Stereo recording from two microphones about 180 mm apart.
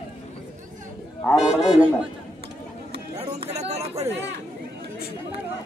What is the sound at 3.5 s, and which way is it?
Speech, 35° right (ahead or behind).